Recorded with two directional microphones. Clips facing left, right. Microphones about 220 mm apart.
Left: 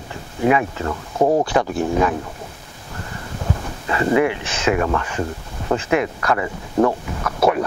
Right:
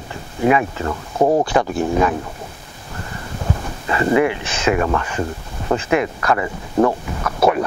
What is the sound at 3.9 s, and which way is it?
Speech, 20° right (ahead or behind).